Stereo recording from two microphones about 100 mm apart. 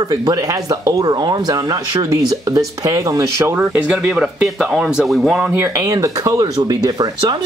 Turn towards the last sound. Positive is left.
turn(degrees=-40)  # may be behind; listen again after turning